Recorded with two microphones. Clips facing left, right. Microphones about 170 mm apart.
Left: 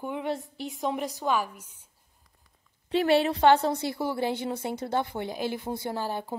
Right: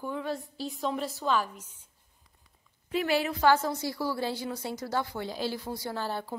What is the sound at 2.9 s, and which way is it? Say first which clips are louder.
A woman's voice: left 5 dB; 30° left (ahead or behind).